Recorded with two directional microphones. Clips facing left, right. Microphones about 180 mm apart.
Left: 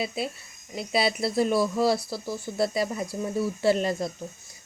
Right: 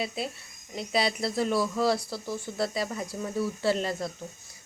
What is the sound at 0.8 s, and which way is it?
Speech, 10° left (ahead or behind).